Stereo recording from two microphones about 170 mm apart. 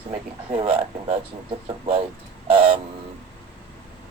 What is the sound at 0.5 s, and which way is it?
Speech, 35° right (ahead or behind).